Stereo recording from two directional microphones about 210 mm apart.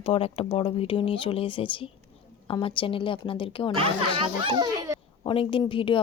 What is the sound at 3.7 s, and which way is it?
Speech, 25° right (ahead or behind).